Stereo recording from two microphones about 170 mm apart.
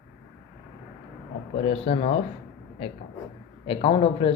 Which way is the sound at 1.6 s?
35° left (ahead or behind).